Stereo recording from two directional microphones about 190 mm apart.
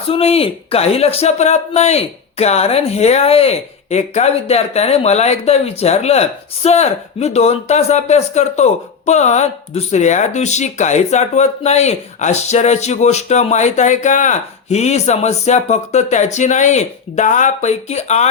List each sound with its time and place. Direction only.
0.1 s speech: 30° left (ahead or behind)